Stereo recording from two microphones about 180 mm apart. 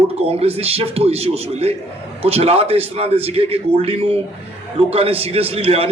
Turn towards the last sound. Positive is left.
turn(degrees=-35)  # may be behind; listen again after turning